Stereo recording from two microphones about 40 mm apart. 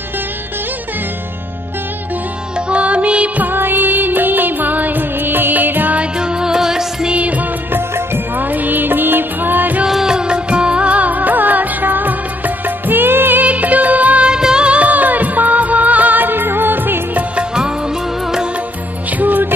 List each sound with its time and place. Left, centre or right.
2.5 s music: right
3.3 s music: right
6.1 s music: right
7.2 s music of bollywood: right
7.7 s music: right
8.4 s music: right
9.8 s music of bollywood: centre; by 13.4 s right
13.4 s music: right
14.2 s music: centre
14.8 s music: right
17.4 s music: centre
19.1 s music: right